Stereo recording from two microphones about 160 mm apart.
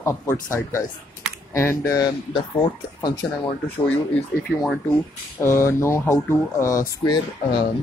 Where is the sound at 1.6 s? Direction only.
20° left (ahead or behind).